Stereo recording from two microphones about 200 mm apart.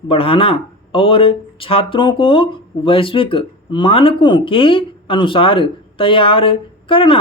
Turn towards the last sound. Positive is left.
turn(degrees=25)  # may be behind; listen again after turning